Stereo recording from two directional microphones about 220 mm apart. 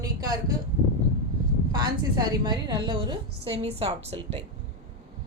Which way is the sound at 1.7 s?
20° right (ahead or behind).